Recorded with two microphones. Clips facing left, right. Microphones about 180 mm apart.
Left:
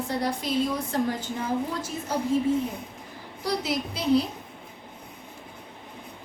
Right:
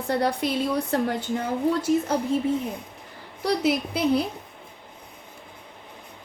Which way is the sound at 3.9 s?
60° right (ahead or behind).